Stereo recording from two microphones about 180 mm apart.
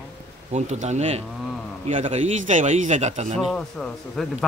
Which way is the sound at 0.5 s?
40° right (ahead or behind).